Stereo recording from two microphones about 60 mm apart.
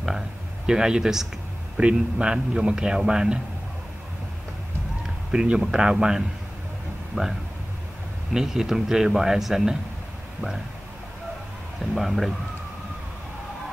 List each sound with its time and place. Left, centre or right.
0.7 s a man's voice: centre
5.3 s a man's voice: centre
7.1 s speech: right
8.3 s a man's voice: centre
11.8 s speech: centre